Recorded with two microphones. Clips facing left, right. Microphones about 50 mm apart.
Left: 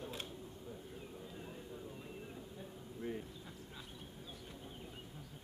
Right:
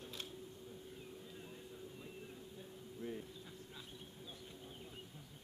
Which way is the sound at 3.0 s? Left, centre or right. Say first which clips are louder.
Left 3 dB; left.